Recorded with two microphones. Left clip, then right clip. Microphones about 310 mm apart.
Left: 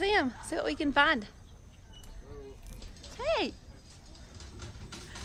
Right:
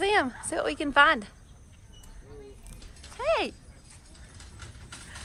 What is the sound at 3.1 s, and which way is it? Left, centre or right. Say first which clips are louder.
Speech: right 4 dB; centre.